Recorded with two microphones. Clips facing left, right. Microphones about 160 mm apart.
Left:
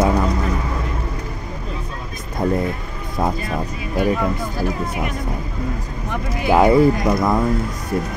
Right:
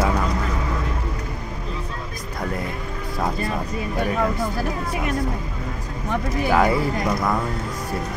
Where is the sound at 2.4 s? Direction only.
25° left (ahead or behind).